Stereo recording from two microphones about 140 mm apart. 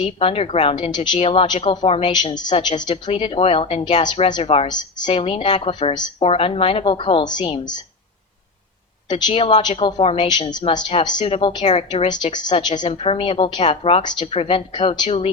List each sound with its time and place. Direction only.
0.0 s a woman's voice: 40° left (ahead or behind)
4.4 s a woman's voice: 45° left (ahead or behind)
4.7 s a woman's voice: 30° left (ahead or behind)
9.0 s a woman's voice: 35° left (ahead or behind)
10.2 s a woman's voice: 30° left (ahead or behind)